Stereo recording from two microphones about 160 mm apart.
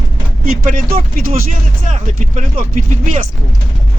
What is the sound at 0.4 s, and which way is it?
Speech, 60° right (ahead or behind).